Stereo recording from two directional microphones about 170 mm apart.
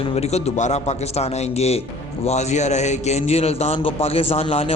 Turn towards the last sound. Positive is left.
turn(degrees=35)  # may be behind; listen again after turning